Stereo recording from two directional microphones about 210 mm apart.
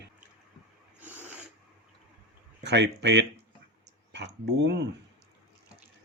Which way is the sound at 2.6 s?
55° right (ahead or behind).